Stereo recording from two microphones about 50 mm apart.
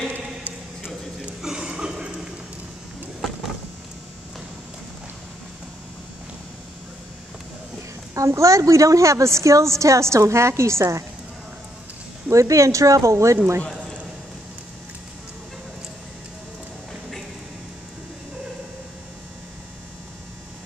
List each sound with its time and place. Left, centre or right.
0.8 s a sound: centre
8.1 s a woman's voice: right
12.3 s a woman's voice: right